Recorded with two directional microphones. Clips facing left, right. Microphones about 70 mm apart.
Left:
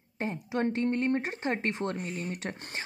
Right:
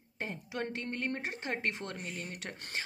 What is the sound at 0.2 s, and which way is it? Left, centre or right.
Speech, left.